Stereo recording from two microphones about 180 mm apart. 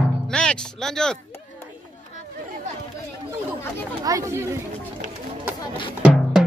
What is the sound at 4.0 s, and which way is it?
Speech, 20° right (ahead or behind).